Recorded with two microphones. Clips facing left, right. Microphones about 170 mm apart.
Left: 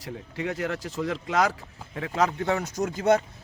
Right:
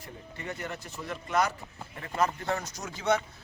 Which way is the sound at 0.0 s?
90° left.